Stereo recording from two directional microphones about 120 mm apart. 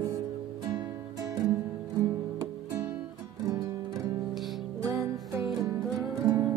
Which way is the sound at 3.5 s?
30° right (ahead or behind).